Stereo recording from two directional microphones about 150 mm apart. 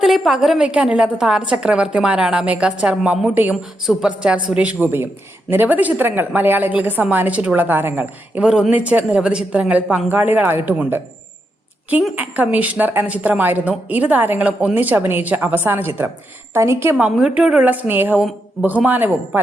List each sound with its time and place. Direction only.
0.0 s a woman's voice: centre (ahead or behind)
12.1 s a woman's voice: 10° right (ahead or behind)
17.0 s a woman's voice: 5° right (ahead or behind)